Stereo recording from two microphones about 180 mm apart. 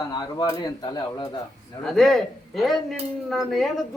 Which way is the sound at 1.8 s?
Centre (ahead or behind).